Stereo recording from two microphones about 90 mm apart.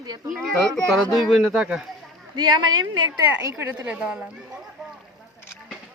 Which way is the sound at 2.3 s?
55° right (ahead or behind).